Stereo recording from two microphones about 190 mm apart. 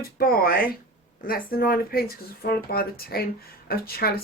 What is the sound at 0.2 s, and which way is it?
Speech, 50° left (ahead or behind).